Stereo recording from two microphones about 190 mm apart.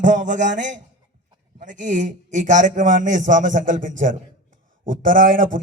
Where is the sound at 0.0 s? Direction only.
40° right (ahead or behind).